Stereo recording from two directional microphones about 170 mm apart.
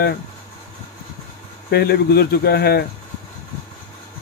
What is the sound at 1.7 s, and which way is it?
Speech, 70° left (ahead or behind).